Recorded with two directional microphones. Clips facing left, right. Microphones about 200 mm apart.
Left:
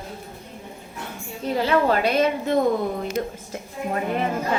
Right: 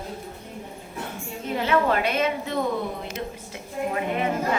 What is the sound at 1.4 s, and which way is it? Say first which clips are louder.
A woman's voice: left 2 dB; 35° left (ahead or behind).